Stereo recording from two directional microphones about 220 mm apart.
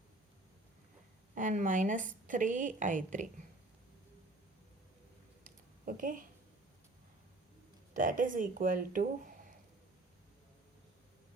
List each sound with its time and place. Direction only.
1.4 s a woman's voice: 35° right (ahead or behind)
5.4 s a sound: 35° right (ahead or behind)
7.9 s a woman's voice: 35° right (ahead or behind)